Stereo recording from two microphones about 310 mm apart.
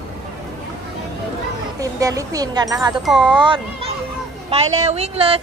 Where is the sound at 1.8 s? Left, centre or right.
Centre.